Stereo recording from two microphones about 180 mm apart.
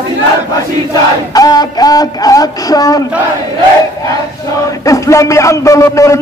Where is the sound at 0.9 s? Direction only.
20° left (ahead or behind).